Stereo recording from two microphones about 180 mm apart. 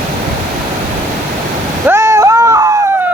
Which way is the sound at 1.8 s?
15° right (ahead or behind).